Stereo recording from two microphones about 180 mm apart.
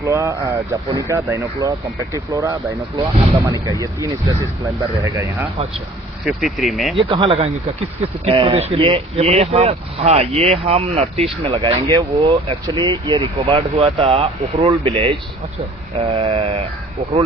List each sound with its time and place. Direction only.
0.0 s speech: 15° right (ahead or behind)
5.1 s speech: 15° right (ahead or behind)
6.2 s speech: centre (ahead or behind)
6.9 s speech: 30° right (ahead or behind)